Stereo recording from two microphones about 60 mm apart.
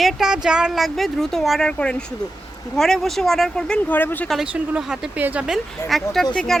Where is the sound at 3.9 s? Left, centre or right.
Left.